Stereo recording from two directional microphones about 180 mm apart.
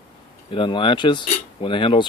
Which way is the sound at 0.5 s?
25° left (ahead or behind).